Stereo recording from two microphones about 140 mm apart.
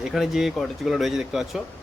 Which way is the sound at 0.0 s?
5° right (ahead or behind).